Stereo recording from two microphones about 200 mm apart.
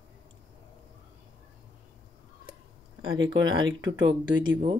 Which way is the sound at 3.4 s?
20° right (ahead or behind).